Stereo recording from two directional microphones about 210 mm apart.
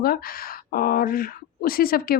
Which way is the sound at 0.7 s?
45° left (ahead or behind).